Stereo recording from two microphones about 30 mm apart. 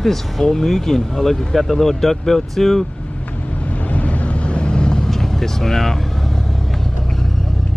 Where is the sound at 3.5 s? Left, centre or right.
Left.